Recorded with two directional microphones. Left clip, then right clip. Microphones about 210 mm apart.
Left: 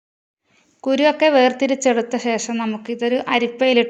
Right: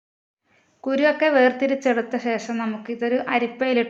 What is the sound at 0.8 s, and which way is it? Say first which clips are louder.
A woman's voice: left 4 dB; 35° left (ahead or behind).